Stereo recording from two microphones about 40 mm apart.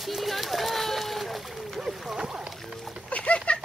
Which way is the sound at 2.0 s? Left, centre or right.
Centre.